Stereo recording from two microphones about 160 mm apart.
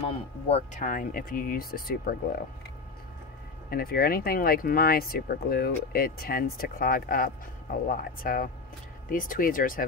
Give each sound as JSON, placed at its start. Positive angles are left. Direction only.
{"t": 0.1, "sound": "speech", "side_deg": 40}
{"t": 0.8, "sound": "speech", "side_deg": 60}
{"t": 3.7, "sound": "speech", "side_deg": 70}